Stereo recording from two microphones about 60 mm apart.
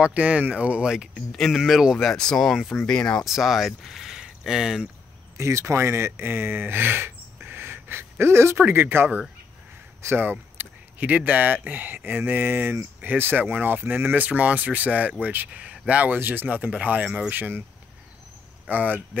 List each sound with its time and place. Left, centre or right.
0.0 s speech: right
1.1 s speech: centre
1.6 s speech: centre
2.1 s speech: centre
2.5 s speech: centre
2.9 s speech: centre
3.3 s speech: centre
5.4 s speech: right; by 17.4 s centre
17.4 s speech: right
18.7 s speech: right